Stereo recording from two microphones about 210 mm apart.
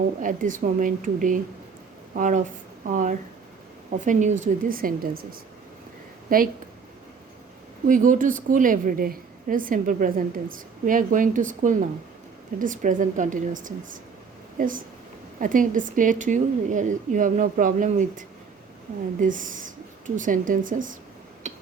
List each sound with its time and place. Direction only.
0.2 s a woman's voice: 40° right (ahead or behind)
7.9 s a woman's voice: 40° right (ahead or behind)
21.5 s a sound: 35° right (ahead or behind)